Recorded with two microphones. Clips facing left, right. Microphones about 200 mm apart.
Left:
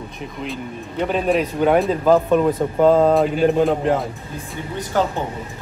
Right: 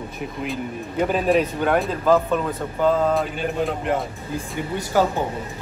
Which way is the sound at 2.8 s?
35° left (ahead or behind).